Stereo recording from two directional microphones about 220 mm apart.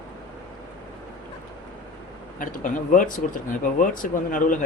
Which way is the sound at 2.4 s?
35° left (ahead or behind).